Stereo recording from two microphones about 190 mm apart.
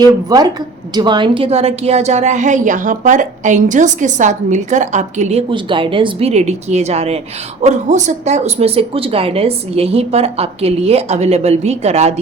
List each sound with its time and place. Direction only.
0.0 s a woman's voice: 20° right (ahead or behind); by 5.4 s 40° right (ahead or behind)
5.5 s a woman's voice: 25° right (ahead or behind)